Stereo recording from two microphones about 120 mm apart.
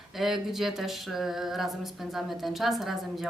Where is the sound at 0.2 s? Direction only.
Centre (ahead or behind).